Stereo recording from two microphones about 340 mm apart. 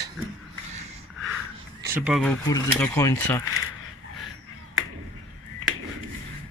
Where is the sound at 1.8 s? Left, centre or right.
Centre.